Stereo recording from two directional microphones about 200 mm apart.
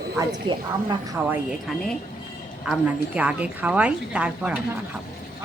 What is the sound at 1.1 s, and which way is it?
A woman's voice, 5° right (ahead or behind).